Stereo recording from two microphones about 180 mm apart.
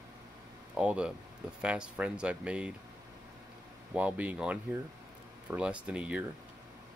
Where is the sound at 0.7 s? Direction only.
5° right (ahead or behind).